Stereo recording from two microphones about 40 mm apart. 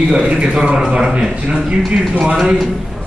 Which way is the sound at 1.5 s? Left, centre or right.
Right.